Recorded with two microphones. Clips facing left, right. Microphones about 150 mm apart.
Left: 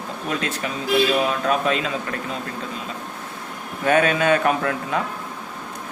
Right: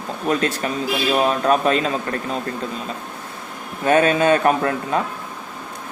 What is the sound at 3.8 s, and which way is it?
Speech, 30° right (ahead or behind).